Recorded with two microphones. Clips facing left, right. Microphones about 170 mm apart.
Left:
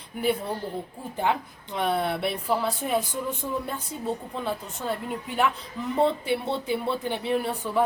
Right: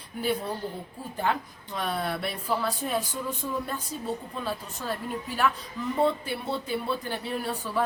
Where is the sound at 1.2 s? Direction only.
20° left (ahead or behind).